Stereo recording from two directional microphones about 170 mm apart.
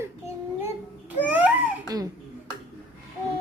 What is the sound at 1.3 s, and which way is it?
Babbling, 10° right (ahead or behind).